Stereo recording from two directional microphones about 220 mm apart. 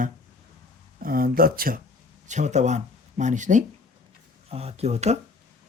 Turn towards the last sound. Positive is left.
turn(degrees=-30)  # may be behind; listen again after turning